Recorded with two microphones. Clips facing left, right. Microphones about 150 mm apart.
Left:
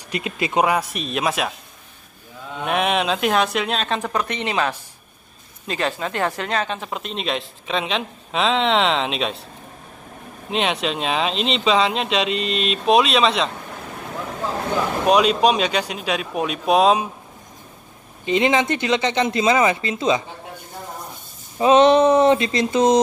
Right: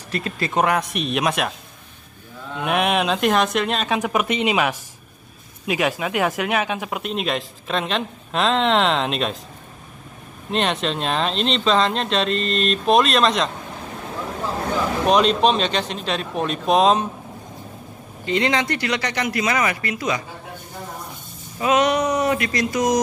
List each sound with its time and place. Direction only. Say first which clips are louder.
0.1 s speech: left 1 dB; 15° left (ahead or behind)
2.5 s speech: even; centre (ahead or behind)
4.0 s speech: right 3 dB; 15° right (ahead or behind); by 9.4 s centre (ahead or behind)
10.5 s speech: even; centre (ahead or behind)
15.0 s speech: left 1 dB; 5° left (ahead or behind)
18.2 s speech: left 3 dB; 20° left (ahead or behind)
21.5 s speech: left 6 dB; 25° left (ahead or behind)